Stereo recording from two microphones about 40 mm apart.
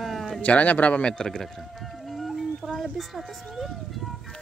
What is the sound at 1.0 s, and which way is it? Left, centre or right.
Speech, left.